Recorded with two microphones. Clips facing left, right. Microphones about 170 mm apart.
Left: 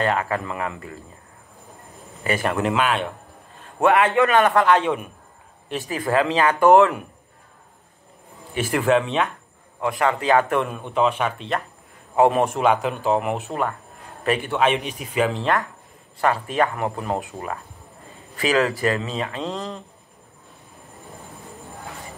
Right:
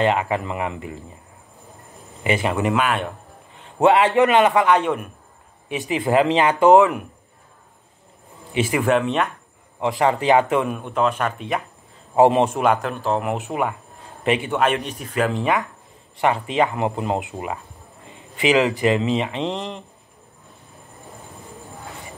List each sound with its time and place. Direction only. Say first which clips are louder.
0.0 s speech: right 3 dB; 20° right (ahead or behind)
2.2 s a man's voice: right 2 dB; 15° right (ahead or behind)
2.5 s speech: right 1 dB; 5° right (ahead or behind)
3.8 s a man's voice: right 2 dB; 20° right (ahead or behind); by 5.1 s centre (ahead or behind)
5.7 s speech: right 3 dB; 15° right (ahead or behind)
8.7 s speech: left 1 dB; 5° right (ahead or behind)
9.8 s speech: right 2 dB; 25° right (ahead or behind)
10.9 s speech: left 3 dB; centre (ahead or behind)
12.2 s speech: right 2 dB; 25° right (ahead or behind)
12.5 s speech: even; centre (ahead or behind)
13.4 s a man's voice: right 2 dB; 10° right (ahead or behind)
14.5 s speech: even; centre (ahead or behind)
16.2 s a man's voice: right 1 dB; 20° right (ahead or behind)